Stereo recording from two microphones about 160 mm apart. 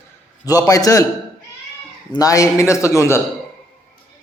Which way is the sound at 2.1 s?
20° left (ahead or behind).